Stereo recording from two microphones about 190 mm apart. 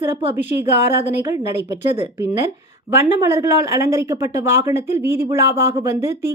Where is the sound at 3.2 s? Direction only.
15° right (ahead or behind).